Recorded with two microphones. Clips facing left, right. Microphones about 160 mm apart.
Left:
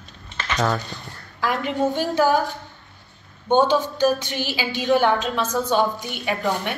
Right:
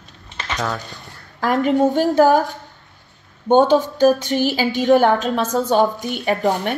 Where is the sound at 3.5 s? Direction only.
45° right (ahead or behind).